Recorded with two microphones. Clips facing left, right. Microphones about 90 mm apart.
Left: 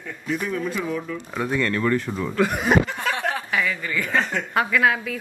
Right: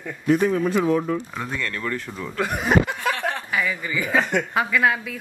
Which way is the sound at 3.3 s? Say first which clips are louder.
Left 1 dB; centre (ahead or behind).